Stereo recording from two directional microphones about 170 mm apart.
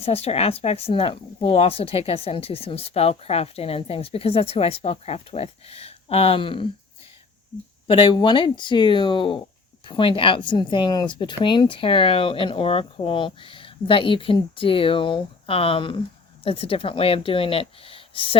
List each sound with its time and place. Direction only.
0.0 s a woman's voice: 35° left (ahead or behind)
7.9 s a woman's voice: 30° left (ahead or behind)